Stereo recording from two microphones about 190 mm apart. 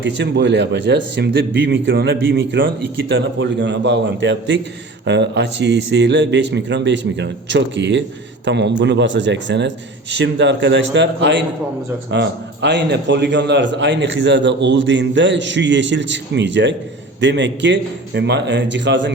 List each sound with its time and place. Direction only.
0.0 s a man's voice: 65° right (ahead or behind)